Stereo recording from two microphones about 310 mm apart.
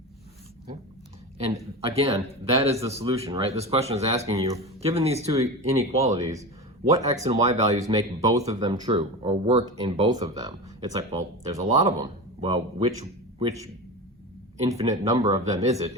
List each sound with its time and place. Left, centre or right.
1.9 s speech: centre
14.6 s speech: centre